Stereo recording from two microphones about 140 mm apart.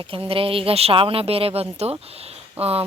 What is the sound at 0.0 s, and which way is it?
Speech, 40° right (ahead or behind).